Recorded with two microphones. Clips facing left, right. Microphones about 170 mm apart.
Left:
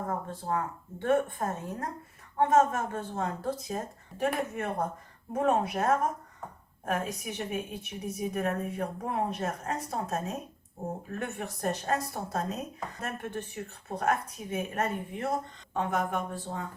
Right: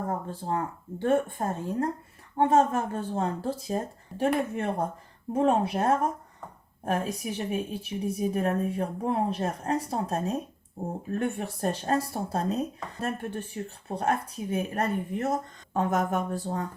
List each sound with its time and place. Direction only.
0.3 s speech: 30° right (ahead or behind)